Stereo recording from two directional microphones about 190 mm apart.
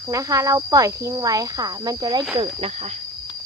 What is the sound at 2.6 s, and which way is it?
Speech, 35° right (ahead or behind).